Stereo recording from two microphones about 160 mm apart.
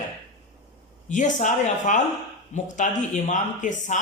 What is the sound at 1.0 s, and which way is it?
Speech, 50° left (ahead or behind).